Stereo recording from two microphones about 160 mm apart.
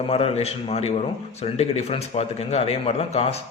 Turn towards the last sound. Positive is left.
turn(degrees=40)  # may be behind; listen again after turning